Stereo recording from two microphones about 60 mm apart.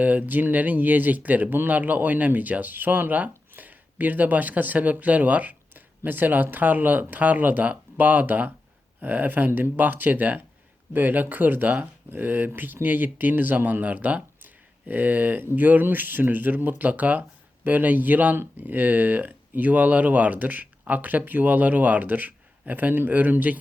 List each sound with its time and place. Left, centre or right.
0.0 s speech: right